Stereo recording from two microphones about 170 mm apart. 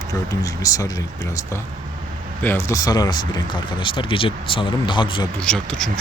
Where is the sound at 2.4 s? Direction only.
15° left (ahead or behind); by 5.3 s 30° left (ahead or behind).